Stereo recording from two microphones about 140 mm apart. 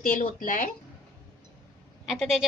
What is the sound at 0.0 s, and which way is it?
Speech, 65° left (ahead or behind).